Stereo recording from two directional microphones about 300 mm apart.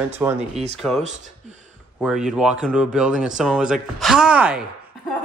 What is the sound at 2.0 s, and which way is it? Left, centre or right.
Speech, centre.